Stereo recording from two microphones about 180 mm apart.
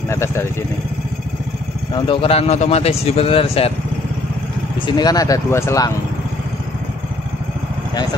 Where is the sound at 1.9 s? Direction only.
30° left (ahead or behind).